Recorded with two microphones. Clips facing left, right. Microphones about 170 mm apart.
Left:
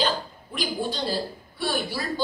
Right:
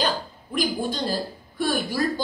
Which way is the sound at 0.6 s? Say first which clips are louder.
Right 3 dB; 45° right (ahead or behind).